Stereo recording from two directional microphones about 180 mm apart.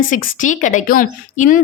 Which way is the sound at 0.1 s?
45° left (ahead or behind).